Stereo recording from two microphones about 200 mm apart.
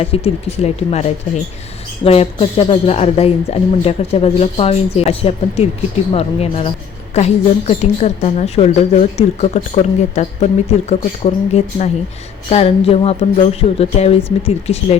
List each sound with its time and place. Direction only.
0.0 s a woman's voice: 30° left (ahead or behind)